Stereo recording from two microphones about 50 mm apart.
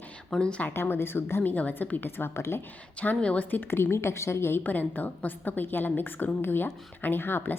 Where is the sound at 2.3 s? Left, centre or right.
Left.